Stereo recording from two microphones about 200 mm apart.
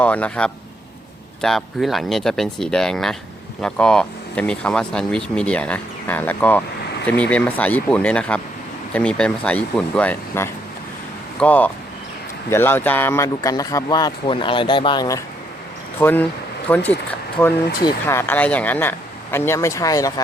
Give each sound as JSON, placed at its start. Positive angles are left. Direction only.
{"t": 0.0, "sound": "speech", "side_deg": 5}